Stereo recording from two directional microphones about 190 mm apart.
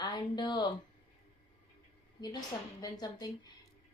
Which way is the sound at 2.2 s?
20° left (ahead or behind).